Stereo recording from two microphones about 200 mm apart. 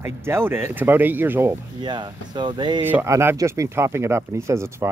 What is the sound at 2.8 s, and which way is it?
Speech, 10° right (ahead or behind).